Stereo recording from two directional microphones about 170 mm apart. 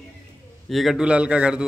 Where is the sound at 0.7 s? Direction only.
Centre (ahead or behind).